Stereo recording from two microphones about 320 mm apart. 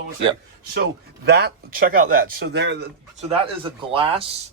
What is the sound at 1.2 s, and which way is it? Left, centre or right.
Speech, right.